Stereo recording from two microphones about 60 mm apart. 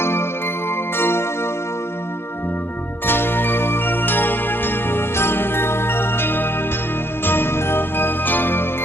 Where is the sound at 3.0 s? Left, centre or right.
Left.